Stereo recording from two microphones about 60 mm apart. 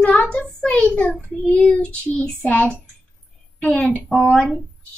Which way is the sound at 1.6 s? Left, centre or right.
Centre.